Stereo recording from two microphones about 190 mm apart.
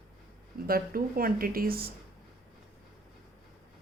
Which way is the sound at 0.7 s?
50° right (ahead or behind).